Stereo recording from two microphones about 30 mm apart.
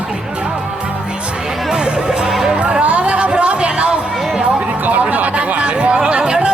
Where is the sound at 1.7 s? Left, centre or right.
Right.